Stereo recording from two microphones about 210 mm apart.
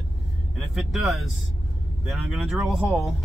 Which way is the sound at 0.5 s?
Centre (ahead or behind).